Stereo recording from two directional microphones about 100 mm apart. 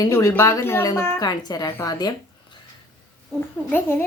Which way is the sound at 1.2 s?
40° left (ahead or behind).